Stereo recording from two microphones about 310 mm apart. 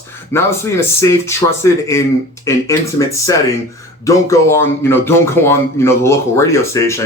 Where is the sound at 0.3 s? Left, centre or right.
Centre.